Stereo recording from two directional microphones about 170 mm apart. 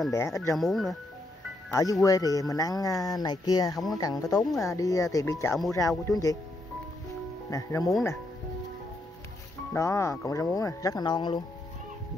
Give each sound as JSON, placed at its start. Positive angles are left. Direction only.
{"t": 0.1, "sound": "speech", "side_deg": 15}
{"t": 0.6, "sound": "speech", "side_deg": 0}
{"t": 1.7, "sound": "speech", "side_deg": 20}
{"t": 3.7, "sound": "speech", "side_deg": 0}
{"t": 4.0, "sound": "speech", "side_deg": 20}
{"t": 7.4, "sound": "speech", "side_deg": 20}
{"t": 9.8, "sound": "speech", "side_deg": 15}